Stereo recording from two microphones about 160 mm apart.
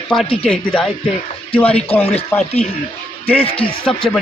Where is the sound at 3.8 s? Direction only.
5° left (ahead or behind).